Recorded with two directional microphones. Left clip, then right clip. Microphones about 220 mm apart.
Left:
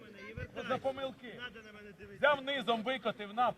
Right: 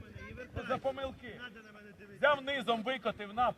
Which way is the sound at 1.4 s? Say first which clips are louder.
Left 2 dB; 40° left (ahead or behind).